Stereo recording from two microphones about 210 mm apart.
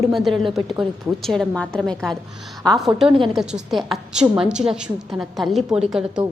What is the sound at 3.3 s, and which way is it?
A woman's voice, centre (ahead or behind).